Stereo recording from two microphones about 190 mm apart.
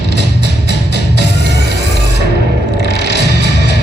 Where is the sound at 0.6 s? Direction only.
65° left (ahead or behind).